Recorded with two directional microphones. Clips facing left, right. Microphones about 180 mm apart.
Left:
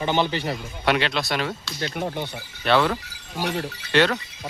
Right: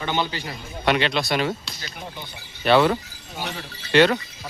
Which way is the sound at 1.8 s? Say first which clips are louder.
Left 9 dB; 60° left (ahead or behind).